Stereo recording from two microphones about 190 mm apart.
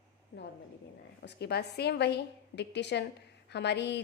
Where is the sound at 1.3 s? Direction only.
60° left (ahead or behind).